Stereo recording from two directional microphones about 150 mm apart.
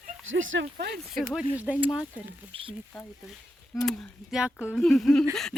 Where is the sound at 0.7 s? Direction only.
90° right.